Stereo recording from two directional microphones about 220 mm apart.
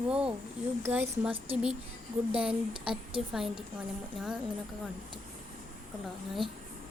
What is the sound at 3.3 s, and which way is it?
Speech, centre (ahead or behind).